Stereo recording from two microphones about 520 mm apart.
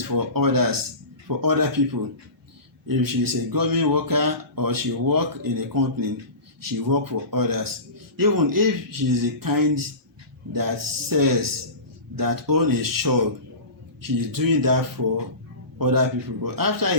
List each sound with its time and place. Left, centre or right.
0.0 s speech: right